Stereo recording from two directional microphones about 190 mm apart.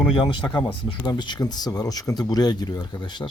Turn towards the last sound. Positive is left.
turn(degrees=25)  # may be behind; listen again after turning